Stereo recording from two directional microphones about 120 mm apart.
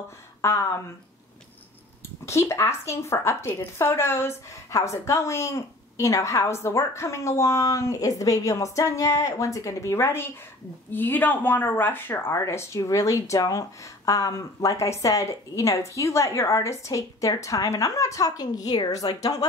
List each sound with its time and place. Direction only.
0.4 s speech: 25° left (ahead or behind)
2.2 s speech: 25° left (ahead or behind)